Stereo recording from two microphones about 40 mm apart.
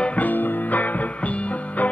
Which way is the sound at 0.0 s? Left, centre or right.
Left.